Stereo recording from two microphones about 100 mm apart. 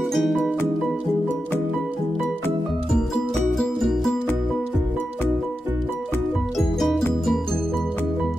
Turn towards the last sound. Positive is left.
turn(degrees=0)  # may be behind; listen again after turning